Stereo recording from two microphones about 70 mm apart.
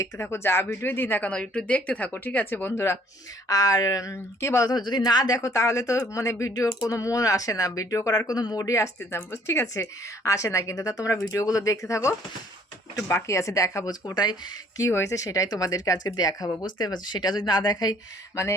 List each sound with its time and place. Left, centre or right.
0.0 s speech: left
1.3 s speech: centre; by 3.0 s left
3.5 s speech: left
4.7 s speech: left
8.3 s speech: left
9.0 s speech: left
10.2 s speech: left
11.1 s speech: left
14.8 s speech: left